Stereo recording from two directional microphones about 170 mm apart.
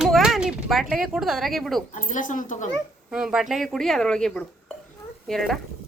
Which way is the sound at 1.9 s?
50° left (ahead or behind).